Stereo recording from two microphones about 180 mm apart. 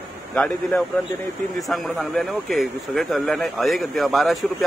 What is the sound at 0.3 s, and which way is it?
A man's voice, 5° left (ahead or behind).